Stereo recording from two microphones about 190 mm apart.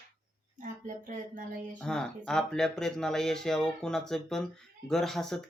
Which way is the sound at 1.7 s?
5° left (ahead or behind).